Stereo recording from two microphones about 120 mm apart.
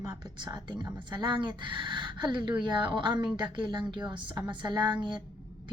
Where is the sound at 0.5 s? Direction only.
40° right (ahead or behind).